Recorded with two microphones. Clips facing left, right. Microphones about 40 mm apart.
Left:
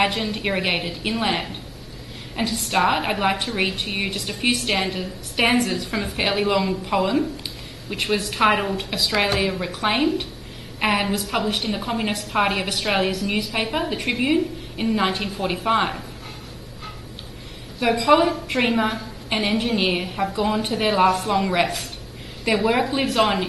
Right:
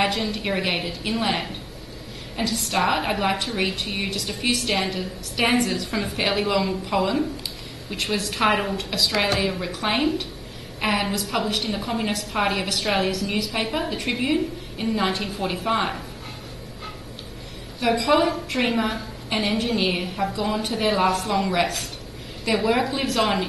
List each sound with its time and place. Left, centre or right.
0.0 s a woman's voice: centre
17.7 s a woman's voice: centre